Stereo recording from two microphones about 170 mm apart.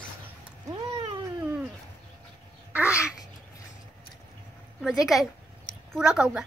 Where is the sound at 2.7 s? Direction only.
10° right (ahead or behind).